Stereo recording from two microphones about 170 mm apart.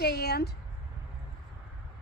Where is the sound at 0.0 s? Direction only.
70° left (ahead or behind).